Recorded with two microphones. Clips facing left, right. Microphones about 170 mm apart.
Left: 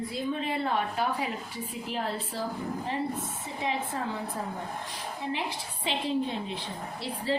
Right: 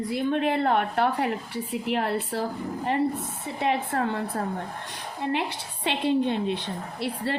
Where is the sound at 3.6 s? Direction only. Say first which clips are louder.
Right 6 dB; 65° right (ahead or behind).